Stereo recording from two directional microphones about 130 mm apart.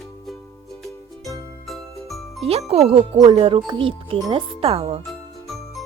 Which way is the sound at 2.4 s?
50° right (ahead or behind).